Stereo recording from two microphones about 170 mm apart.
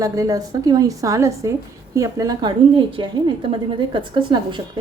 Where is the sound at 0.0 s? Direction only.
20° right (ahead or behind).